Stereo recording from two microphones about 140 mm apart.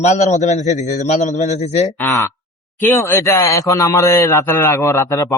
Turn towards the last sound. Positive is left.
turn(degrees=25)  # may be behind; listen again after turning